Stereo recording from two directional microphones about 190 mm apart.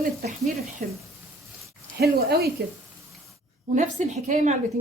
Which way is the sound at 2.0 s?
55° right (ahead or behind).